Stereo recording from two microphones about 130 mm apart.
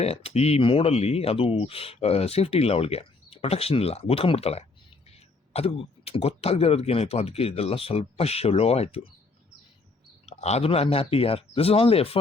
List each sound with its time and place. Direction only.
0.0 s speech: 50° left (ahead or behind)
10.2 s speech: 55° left (ahead or behind)